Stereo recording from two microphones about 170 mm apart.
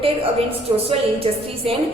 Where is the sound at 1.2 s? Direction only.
35° right (ahead or behind).